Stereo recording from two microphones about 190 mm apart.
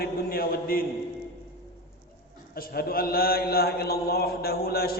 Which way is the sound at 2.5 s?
50° left (ahead or behind).